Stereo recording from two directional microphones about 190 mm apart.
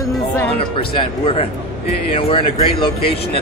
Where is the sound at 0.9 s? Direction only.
30° left (ahead or behind).